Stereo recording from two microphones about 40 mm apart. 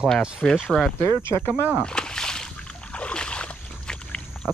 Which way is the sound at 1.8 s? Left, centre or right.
Centre.